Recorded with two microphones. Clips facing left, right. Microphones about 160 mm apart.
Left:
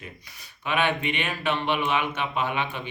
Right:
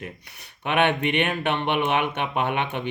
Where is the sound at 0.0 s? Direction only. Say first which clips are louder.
Right 5 dB; 60° right (ahead or behind).